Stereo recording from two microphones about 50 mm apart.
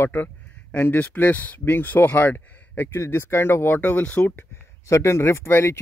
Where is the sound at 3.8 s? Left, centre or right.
Left.